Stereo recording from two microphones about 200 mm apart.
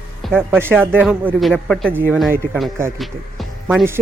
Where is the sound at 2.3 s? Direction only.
10° right (ahead or behind).